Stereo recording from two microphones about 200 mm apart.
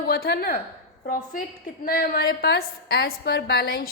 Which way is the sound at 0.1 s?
50° left (ahead or behind).